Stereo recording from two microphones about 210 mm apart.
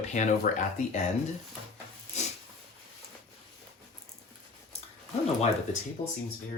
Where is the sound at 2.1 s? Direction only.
35° left (ahead or behind).